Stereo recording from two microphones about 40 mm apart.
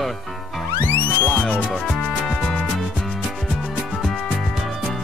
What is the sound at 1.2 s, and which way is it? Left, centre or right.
Music, left.